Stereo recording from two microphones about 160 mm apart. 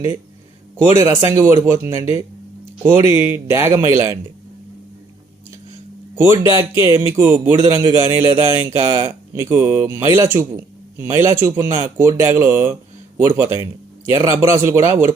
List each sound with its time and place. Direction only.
0.8 s speech: 15° right (ahead or behind)
6.1 s speech: 15° right (ahead or behind)